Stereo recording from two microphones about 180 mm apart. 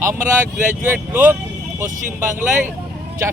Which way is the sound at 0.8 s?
10° right (ahead or behind).